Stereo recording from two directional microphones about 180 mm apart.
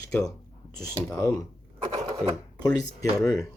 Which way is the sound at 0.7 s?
20° left (ahead or behind).